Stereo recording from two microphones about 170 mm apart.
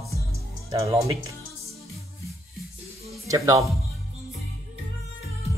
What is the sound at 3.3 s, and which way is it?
Speech, 20° right (ahead or behind).